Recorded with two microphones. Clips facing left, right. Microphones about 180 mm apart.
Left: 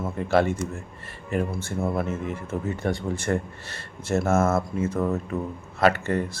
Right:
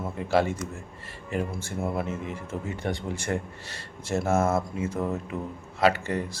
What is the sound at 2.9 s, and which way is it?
Speech, 15° right (ahead or behind).